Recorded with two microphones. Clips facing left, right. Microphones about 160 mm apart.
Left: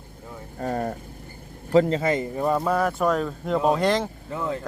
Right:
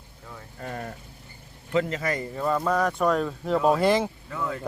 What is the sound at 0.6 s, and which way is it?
Speech, 40° left (ahead or behind).